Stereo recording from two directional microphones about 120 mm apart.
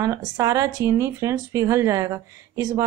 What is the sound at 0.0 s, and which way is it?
Speech, 30° right (ahead or behind).